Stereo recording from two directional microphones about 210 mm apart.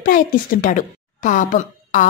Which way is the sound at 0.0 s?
40° left (ahead or behind).